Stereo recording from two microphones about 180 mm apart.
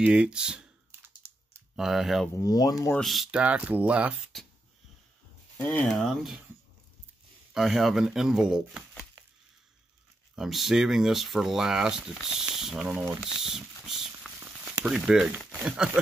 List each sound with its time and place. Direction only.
0.0 s computer keyboard: 5° right (ahead or behind)
1.8 s speech: centre (ahead or behind)
2.3 s speech: 20° left (ahead or behind)
2.9 s speech: centre (ahead or behind)
5.6 s speech: 5° left (ahead or behind)
7.5 s speech: centre (ahead or behind)
10.3 s speech: centre (ahead or behind)
13.4 s a sound: centre (ahead or behind)
14.9 s speech: 5° right (ahead or behind)